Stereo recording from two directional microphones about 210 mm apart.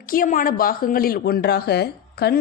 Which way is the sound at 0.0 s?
40° left (ahead or behind).